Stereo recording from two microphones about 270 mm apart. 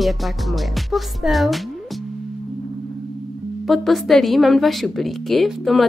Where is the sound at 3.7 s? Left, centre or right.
Centre.